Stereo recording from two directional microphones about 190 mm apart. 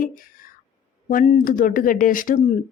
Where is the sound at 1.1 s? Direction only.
45° left (ahead or behind).